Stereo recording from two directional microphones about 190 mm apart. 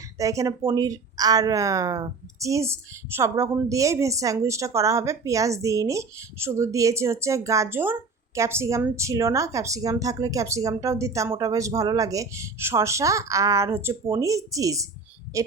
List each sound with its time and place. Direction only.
0.2 s speech: 15° right (ahead or behind)